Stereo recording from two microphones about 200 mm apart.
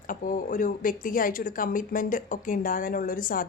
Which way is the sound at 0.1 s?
40° left (ahead or behind).